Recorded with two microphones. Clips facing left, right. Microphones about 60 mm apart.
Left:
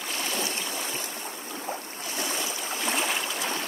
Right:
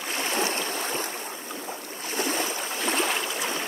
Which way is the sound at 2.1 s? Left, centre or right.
Right.